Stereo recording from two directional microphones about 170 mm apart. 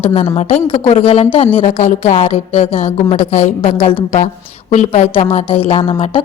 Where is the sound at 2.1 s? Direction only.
35° left (ahead or behind).